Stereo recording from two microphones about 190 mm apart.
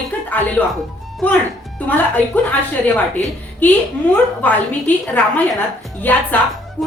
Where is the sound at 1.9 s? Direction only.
10° left (ahead or behind).